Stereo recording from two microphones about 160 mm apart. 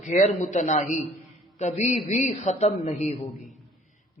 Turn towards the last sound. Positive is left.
turn(degrees=45)  # may be behind; listen again after turning